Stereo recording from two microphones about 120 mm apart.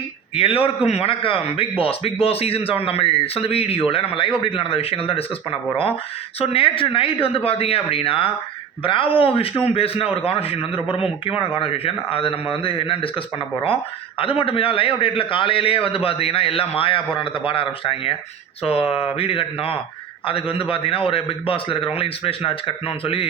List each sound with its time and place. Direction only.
0.3 s a man's voice: 50° left (ahead or behind)